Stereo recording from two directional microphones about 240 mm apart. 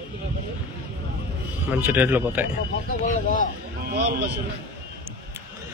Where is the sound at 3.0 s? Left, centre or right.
Left.